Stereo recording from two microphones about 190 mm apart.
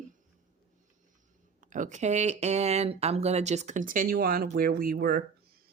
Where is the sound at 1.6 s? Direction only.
40° right (ahead or behind).